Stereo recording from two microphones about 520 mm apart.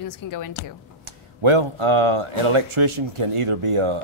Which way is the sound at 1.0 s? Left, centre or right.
Right.